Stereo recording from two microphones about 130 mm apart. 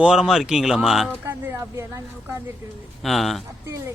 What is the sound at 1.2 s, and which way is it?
Speech, 15° right (ahead or behind).